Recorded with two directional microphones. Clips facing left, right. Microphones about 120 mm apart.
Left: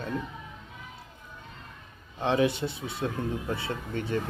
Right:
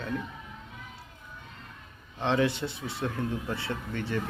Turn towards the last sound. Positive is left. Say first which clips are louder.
# left 1 dB
turn(degrees=20)  # may be behind; listen again after turning